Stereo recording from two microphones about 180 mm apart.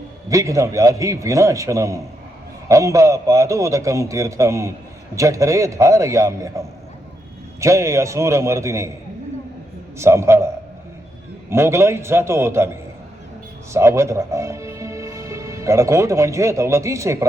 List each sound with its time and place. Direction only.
0.3 s a man's voice: 15° right (ahead or behind)
10.0 s a man's voice: 15° right (ahead or behind)
13.7 s speech: 15° right (ahead or behind)